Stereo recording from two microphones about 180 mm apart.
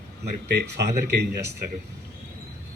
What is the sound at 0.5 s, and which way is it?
Speech, 65° right (ahead or behind).